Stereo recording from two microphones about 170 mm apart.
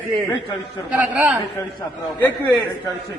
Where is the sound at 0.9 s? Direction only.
5° right (ahead or behind).